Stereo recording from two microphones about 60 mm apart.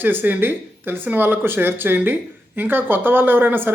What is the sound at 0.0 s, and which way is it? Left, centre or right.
Speech, right.